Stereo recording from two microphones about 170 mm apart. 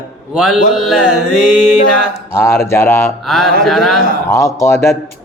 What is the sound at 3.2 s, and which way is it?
Mantra, centre (ahead or behind).